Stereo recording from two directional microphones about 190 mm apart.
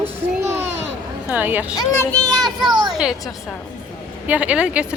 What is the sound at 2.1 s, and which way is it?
Child singing, 15° right (ahead or behind).